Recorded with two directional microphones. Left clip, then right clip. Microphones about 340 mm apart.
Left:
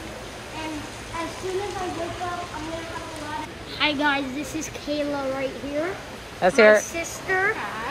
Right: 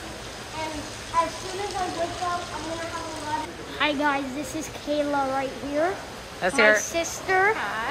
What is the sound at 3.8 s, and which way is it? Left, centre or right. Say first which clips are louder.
Speech: left 1 dB; centre.